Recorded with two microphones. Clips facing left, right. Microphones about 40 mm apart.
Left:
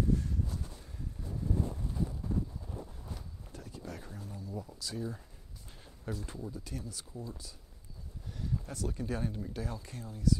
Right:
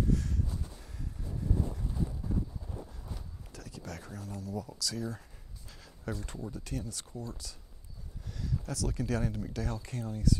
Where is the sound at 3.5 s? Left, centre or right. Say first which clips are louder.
Right 1 dB; right.